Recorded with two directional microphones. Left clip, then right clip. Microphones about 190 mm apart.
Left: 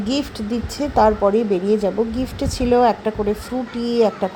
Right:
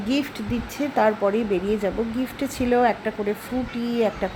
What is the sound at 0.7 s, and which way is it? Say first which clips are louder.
A woman's voice: left 5 dB; 10° left (ahead or behind).